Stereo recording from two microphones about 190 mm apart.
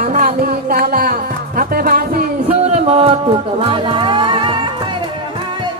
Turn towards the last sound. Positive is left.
turn(degrees=-25)  # may be behind; listen again after turning